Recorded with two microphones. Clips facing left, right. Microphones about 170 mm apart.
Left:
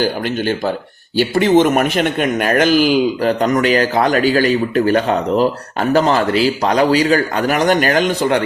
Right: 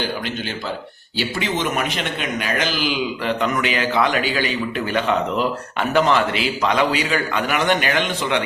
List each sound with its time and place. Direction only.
1.1 s speech: 50° left (ahead or behind)